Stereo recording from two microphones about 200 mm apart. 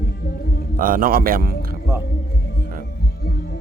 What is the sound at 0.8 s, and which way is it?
Speech, 45° right (ahead or behind).